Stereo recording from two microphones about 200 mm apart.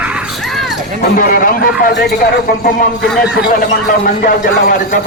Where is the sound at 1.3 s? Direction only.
45° left (ahead or behind).